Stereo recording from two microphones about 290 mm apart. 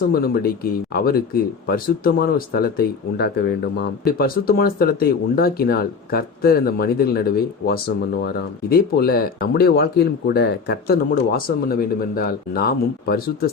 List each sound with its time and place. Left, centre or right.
0.1 s speech: left